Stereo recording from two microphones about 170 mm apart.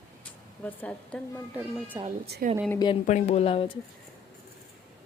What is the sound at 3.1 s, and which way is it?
Speech, 40° left (ahead or behind).